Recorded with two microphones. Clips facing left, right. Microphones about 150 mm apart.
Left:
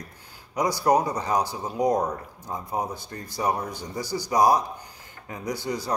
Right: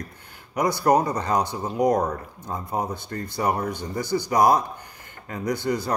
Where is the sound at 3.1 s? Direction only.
10° left (ahead or behind).